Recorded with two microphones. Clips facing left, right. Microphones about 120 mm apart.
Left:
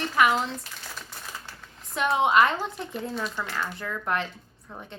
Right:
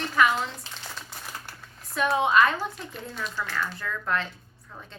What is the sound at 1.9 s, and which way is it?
Speech, 20° left (ahead or behind).